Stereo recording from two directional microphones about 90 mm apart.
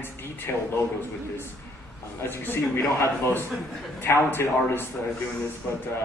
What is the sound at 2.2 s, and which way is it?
Speech, 25° left (ahead or behind).